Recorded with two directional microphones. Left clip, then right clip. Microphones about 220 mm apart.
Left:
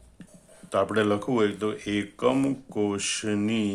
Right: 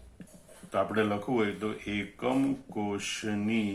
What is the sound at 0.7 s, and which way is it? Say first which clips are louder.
Speech: left 5 dB; 45° left (ahead or behind).